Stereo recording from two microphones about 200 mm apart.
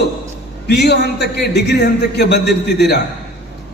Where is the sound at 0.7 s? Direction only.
55° left (ahead or behind).